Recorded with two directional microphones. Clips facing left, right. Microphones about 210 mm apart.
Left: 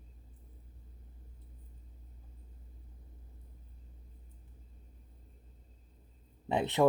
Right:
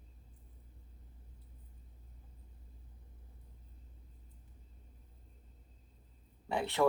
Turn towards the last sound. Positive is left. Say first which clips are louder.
# left 4 dB
turn(degrees=20)  # may be behind; listen again after turning